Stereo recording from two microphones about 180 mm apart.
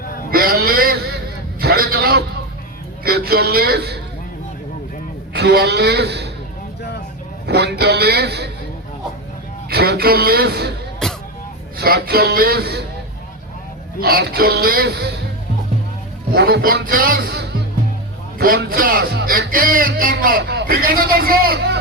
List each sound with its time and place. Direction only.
0.3 s a sound: 55° right (ahead or behind)
1.6 s a man's voice: 55° right (ahead or behind)
5.3 s speech: 65° right (ahead or behind)
7.4 s speech: 65° right (ahead or behind)
9.6 s speech: 60° right (ahead or behind)
11.0 s music: 5° left (ahead or behind)
11.8 s speech: 60° right (ahead or behind)
14.0 s speech: 60° right (ahead or behind)
16.3 s speech: 60° right (ahead or behind)
18.3 s speech: 55° right (ahead or behind)